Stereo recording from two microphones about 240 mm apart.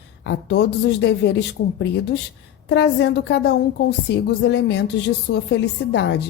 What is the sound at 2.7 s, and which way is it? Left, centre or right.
A woman's voice, left.